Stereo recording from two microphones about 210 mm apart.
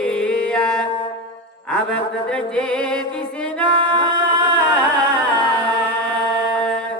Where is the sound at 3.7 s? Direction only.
20° right (ahead or behind).